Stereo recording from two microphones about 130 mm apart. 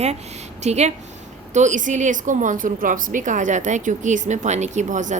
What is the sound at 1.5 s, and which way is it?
A woman's voice, 70° right (ahead or behind).